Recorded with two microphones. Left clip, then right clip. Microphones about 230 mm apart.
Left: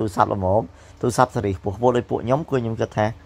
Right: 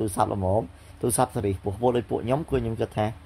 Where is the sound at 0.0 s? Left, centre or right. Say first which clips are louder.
Left 5 dB; centre.